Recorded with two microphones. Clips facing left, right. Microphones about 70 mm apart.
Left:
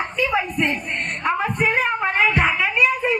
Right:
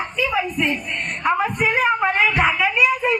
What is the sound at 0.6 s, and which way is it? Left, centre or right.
Speech, left.